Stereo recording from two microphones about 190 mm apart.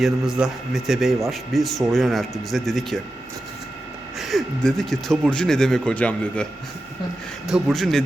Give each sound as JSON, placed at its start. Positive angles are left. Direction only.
{"t": 0.0, "sound": "speech", "side_deg": -5}
{"t": 4.2, "sound": "speech", "side_deg": 0}